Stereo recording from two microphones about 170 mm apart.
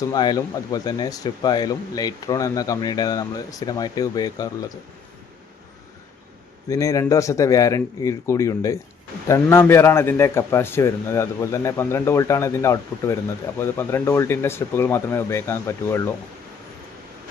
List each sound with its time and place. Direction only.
0.0 s speech: 25° left (ahead or behind)
6.7 s a man's voice: 20° left (ahead or behind)